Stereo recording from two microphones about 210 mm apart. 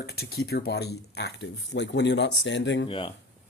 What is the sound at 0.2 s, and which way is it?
Speech, 50° left (ahead or behind).